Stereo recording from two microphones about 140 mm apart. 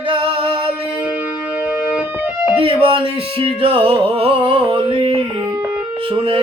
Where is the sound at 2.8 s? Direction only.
40° right (ahead or behind).